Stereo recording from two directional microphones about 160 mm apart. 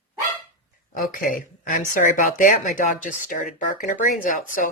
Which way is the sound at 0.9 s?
60° left (ahead or behind).